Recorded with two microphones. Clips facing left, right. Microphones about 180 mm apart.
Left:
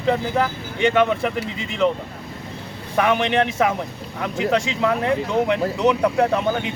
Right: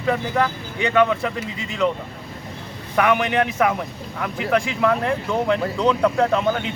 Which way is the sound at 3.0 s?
25° left (ahead or behind).